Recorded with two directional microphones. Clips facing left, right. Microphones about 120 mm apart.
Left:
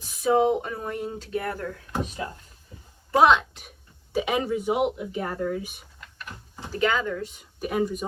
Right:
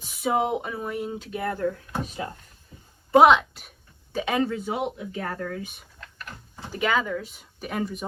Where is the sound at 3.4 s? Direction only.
Centre (ahead or behind).